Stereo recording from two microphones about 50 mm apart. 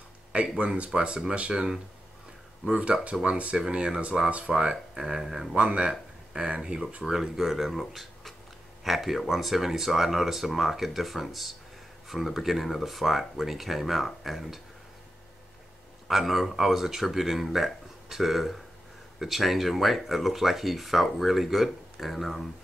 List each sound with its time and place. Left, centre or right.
0.3 s speech: right
2.8 s speech: right; by 5.5 s centre
5.5 s speech: centre
16.1 s speech: centre